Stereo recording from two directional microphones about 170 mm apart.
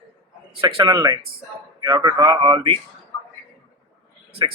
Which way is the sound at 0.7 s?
25° right (ahead or behind).